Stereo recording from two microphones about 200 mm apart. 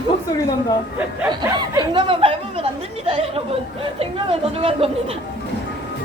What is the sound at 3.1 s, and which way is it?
A woman's voice, 30° right (ahead or behind).